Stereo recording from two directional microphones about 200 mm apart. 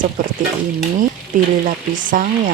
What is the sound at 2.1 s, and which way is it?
Frying, 45° right (ahead or behind).